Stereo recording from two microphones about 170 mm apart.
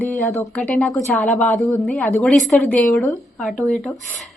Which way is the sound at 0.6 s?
5° left (ahead or behind).